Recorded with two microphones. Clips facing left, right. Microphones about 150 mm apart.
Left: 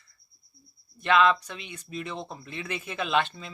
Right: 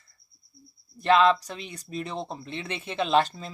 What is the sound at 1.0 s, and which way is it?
Speech, 35° right (ahead or behind).